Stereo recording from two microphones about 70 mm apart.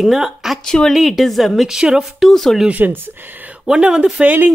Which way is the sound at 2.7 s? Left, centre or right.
Right.